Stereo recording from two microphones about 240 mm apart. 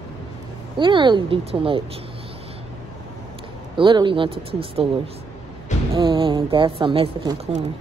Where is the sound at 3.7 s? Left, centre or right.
Centre.